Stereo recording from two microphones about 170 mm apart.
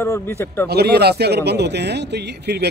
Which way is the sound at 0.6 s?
70° right (ahead or behind).